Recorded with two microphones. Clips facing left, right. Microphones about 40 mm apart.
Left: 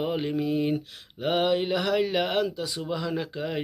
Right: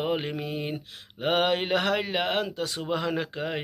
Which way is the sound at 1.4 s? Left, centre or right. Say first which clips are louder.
Even; right.